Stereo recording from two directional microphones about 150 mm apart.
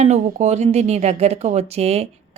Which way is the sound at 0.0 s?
50° right (ahead or behind).